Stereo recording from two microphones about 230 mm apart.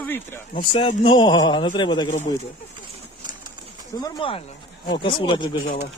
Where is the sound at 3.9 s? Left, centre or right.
Centre.